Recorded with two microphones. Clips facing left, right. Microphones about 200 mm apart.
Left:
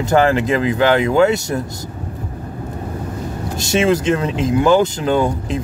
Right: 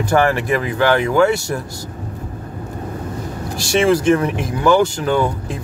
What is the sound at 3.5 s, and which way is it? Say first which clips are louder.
Speech: right 1 dB; 20° left (ahead or behind).